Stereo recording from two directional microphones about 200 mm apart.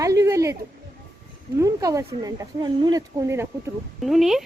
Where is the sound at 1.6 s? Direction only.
15° right (ahead or behind).